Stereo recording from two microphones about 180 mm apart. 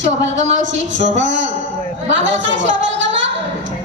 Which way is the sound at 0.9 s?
90° right.